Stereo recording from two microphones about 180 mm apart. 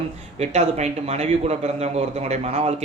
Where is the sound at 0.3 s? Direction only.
35° right (ahead or behind).